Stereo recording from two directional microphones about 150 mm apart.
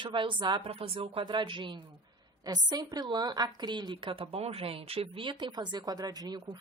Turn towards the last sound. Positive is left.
turn(degrees=-30)  # may be behind; listen again after turning